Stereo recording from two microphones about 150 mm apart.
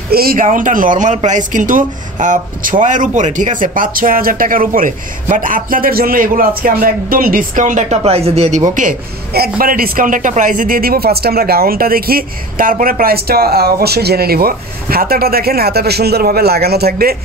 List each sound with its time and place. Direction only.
0.1 s speech: 80° right; by 8.6 s 45° right (ahead or behind)
8.7 s a man's voice: 75° right (ahead or behind); by 17.2 s 90° right